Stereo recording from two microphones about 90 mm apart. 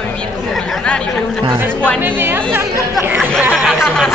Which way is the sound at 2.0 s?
25° right (ahead or behind).